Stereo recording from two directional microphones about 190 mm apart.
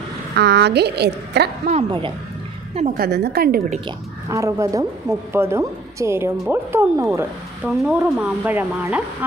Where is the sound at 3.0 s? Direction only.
55° right (ahead or behind).